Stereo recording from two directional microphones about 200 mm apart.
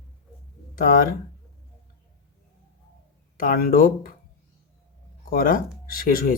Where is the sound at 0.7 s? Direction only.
45° left (ahead or behind).